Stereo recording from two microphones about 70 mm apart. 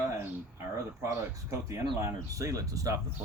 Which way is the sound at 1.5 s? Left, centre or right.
Right.